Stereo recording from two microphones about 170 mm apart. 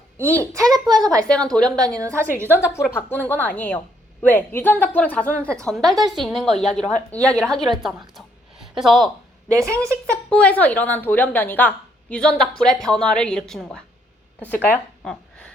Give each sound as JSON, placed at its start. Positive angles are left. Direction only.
{"t": 0.3, "sound": "a child's voice", "side_deg": -20}
{"t": 1.3, "sound": "a woman's voice", "side_deg": 5}
{"t": 2.0, "sound": "a woman's voice", "side_deg": -15}
{"t": 2.5, "sound": "a woman's voice", "side_deg": 15}
{"t": 9.5, "sound": "a woman's voice", "side_deg": -20}
{"t": 10.2, "sound": "a woman's voice", "side_deg": 5}